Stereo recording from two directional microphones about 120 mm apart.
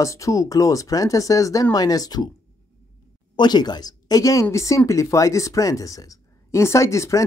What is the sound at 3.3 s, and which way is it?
Speech, 35° left (ahead or behind).